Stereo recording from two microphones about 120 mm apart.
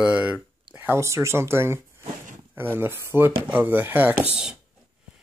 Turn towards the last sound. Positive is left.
turn(degrees=-10)  # may be behind; listen again after turning